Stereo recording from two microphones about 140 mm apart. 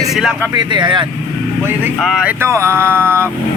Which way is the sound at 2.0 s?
5° right (ahead or behind).